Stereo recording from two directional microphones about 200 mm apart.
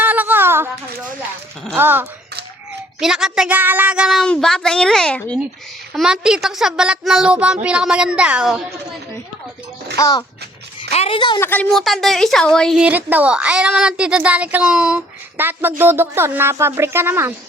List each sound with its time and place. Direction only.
0.0 s a sound: 10° right (ahead or behind)
1.6 s a woman's voice: 10° right (ahead or behind)
10.0 s a woman's voice: 20° left (ahead or behind)
11.4 s a woman's voice: 5° left (ahead or behind); by 17.3 s 10° right (ahead or behind)